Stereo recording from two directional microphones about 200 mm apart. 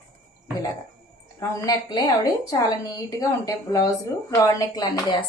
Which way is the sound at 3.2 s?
15° left (ahead or behind).